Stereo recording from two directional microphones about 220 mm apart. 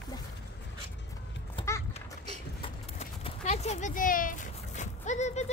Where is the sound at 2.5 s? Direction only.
25° left (ahead or behind).